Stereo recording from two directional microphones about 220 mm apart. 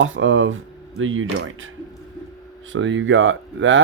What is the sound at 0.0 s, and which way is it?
Speech, 65° right (ahead or behind).